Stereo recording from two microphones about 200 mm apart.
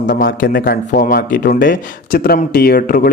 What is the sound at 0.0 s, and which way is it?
Speech, 45° left (ahead or behind).